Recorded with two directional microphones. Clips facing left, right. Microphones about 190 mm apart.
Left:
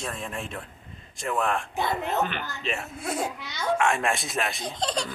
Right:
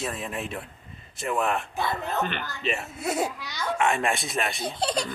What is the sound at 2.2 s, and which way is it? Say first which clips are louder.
Speech: right 2 dB; centre (ahead or behind).